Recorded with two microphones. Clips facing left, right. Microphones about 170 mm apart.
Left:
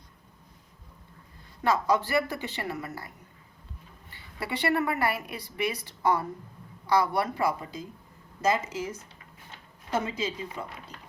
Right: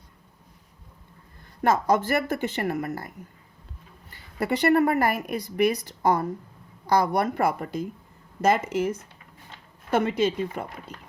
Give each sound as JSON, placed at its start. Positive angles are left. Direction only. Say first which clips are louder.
{"t": 1.6, "sound": "speech", "louder": "right 4 dB", "side_deg": -45}
{"t": 4.1, "sound": "speech", "louder": "right 8 dB", "side_deg": -45}